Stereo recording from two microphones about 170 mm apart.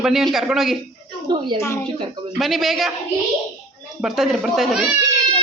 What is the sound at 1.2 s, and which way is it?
Speech, 30° right (ahead or behind).